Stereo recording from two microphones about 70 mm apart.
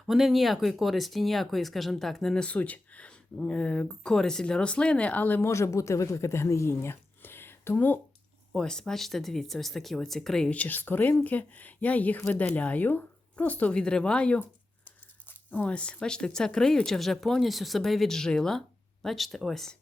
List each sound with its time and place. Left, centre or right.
0.1 s speech: centre
2.4 s speech: left
5.4 s speech: left
8.5 s speech: centre
10.5 s speech: left
14.8 s tearing: left
15.7 s speech: centre